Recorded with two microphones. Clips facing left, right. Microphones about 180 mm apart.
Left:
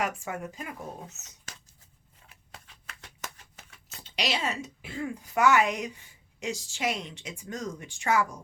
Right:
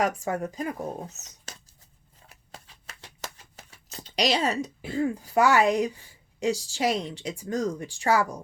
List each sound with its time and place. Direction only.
0.0 s speech: 35° right (ahead or behind)
3.0 s speech: 35° right (ahead or behind)